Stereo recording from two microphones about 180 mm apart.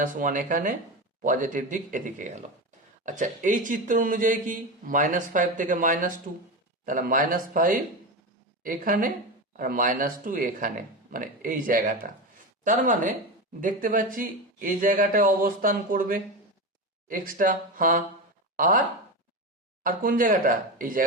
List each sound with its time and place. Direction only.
0.0 s speech: 45° right (ahead or behind)